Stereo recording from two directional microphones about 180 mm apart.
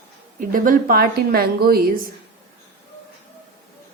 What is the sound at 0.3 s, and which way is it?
A woman's voice, 50° right (ahead or behind).